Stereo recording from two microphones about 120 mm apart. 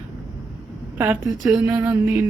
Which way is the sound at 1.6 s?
20° right (ahead or behind).